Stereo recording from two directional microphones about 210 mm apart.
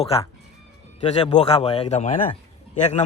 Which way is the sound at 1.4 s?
30° left (ahead or behind).